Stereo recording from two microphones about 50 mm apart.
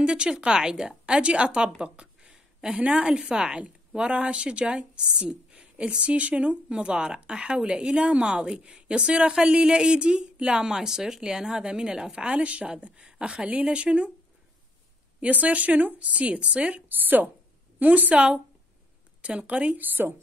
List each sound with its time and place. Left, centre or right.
0.0 s a woman's voice: centre
1.8 s a sound: centre
2.8 s a woman's voice: right
15.1 s a woman's voice: right
16.9 s a woman's voice: right
19.2 s a woman's voice: right
19.8 s a woman's voice: right